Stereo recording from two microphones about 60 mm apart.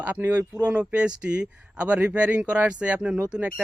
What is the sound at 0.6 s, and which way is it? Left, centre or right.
Speech, right.